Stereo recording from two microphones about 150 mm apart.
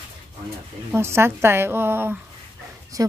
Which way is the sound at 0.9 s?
15° right (ahead or behind).